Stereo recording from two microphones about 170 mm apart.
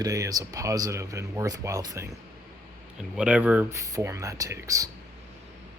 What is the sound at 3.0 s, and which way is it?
Speech, 5° right (ahead or behind).